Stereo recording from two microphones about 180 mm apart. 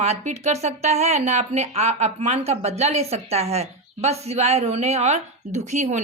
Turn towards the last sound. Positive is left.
turn(degrees=-40)  # may be behind; listen again after turning